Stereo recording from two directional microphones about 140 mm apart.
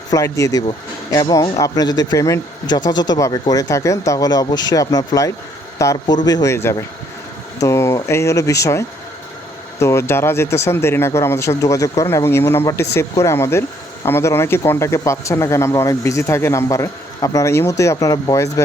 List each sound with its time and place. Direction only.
0.1 s speech: 20° left (ahead or behind)